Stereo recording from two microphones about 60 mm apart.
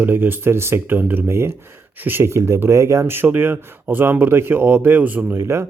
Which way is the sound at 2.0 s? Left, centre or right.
Right.